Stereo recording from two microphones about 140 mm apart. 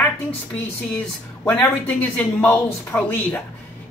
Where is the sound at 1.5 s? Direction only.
15° left (ahead or behind).